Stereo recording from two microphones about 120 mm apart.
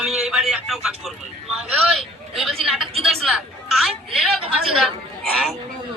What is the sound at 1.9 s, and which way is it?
A woman's voice, centre (ahead or behind).